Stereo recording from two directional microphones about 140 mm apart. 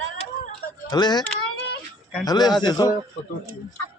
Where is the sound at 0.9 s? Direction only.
30° left (ahead or behind).